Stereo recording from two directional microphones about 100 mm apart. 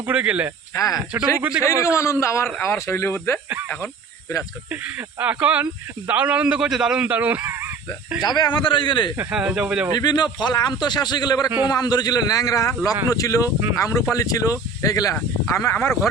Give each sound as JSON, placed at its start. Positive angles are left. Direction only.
{"t": 0.0, "sound": "a man's voice", "side_deg": -15}
{"t": 0.7, "sound": "speech", "side_deg": 35}
{"t": 1.4, "sound": "a man's voice", "side_deg": -10}
{"t": 2.0, "sound": "speech", "side_deg": 30}
{"t": 4.7, "sound": "a man's voice", "side_deg": -15}
{"t": 8.2, "sound": "a man's voice", "side_deg": 45}
{"t": 9.3, "sound": "a man's voice", "side_deg": -10}
{"t": 10.0, "sound": "a man's voice", "side_deg": 45}